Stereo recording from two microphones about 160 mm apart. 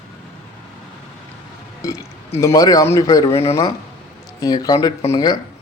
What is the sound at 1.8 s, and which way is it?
Speech, 20° left (ahead or behind).